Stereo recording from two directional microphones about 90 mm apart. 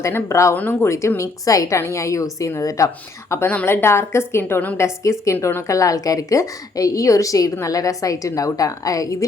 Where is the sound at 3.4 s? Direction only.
20° left (ahead or behind).